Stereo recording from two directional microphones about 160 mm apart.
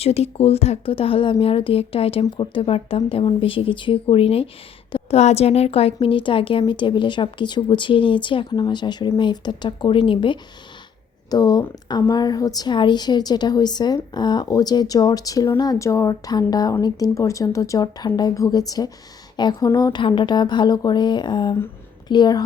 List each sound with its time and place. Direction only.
0.0 s a woman's voice: 40° left (ahead or behind)
4.9 s a sound: 30° left (ahead or behind)
5.2 s a woman's voice: 40° left (ahead or behind)